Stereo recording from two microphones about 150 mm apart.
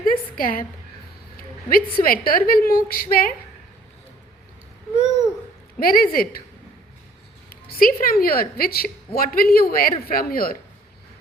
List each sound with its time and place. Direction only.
0.0 s a sound: 75° left (ahead or behind)
1.4 s a woman's voice: 75° left (ahead or behind)
5.8 s speech: 75° left (ahead or behind)
7.5 s a woman's voice: 80° left